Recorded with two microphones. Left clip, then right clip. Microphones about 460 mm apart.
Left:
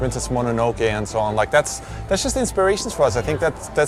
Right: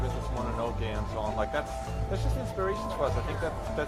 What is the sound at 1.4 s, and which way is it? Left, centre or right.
Speech, left.